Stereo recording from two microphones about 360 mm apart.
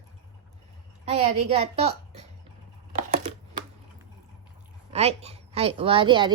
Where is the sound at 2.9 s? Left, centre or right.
Centre.